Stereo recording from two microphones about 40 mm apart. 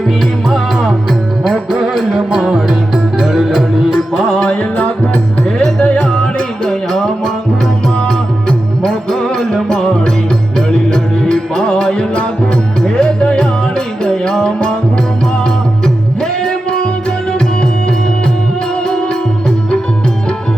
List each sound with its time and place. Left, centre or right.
0.4 s music: centre
1.5 s music: centre
5.8 s music: left
6.7 s music: centre
16.2 s music: centre